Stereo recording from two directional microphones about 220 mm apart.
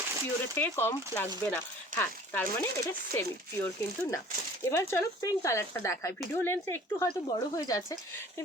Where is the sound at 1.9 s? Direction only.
35° right (ahead or behind).